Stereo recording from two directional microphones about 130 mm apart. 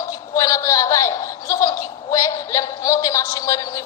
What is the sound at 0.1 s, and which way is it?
Chuckle, 25° left (ahead or behind).